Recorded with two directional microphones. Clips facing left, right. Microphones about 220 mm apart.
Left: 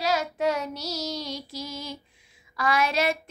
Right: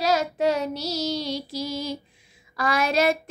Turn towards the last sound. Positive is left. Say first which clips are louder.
# right 3 dB
turn(degrees=-40)  # may be behind; listen again after turning